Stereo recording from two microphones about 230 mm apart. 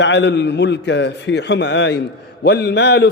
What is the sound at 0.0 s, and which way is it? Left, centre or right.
A man's voice, left.